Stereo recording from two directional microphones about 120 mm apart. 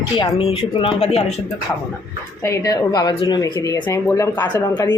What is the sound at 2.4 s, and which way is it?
Speech, 25° left (ahead or behind).